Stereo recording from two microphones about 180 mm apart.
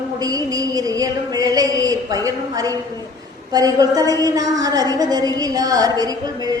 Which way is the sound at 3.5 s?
20° right (ahead or behind).